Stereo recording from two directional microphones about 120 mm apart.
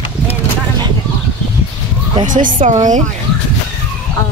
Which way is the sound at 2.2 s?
90° right.